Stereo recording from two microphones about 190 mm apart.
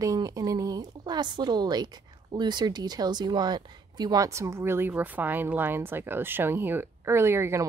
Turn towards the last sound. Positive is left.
turn(degrees=-15)  # may be behind; listen again after turning